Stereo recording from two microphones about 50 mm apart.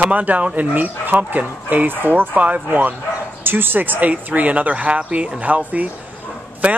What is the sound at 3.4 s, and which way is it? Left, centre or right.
Speech, right.